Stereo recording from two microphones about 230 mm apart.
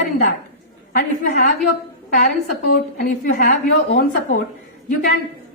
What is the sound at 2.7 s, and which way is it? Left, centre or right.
A woman's voice, left.